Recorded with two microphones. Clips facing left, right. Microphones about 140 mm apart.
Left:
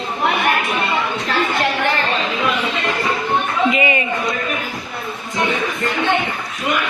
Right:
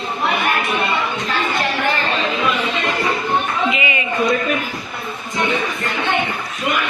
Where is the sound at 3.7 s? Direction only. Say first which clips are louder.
Left 4 dB; 40° left (ahead or behind).